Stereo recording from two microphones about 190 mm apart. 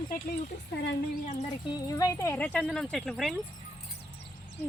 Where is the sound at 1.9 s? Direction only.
15° left (ahead or behind); by 3.3 s centre (ahead or behind).